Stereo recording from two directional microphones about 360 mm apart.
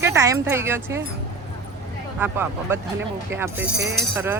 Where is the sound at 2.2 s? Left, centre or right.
Centre.